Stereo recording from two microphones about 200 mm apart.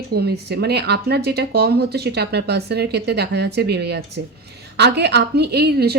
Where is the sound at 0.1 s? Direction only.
55° right (ahead or behind).